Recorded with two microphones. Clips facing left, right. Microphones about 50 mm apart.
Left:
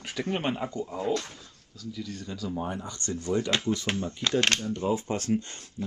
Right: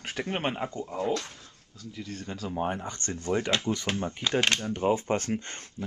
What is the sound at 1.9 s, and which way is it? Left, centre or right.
Speech, right.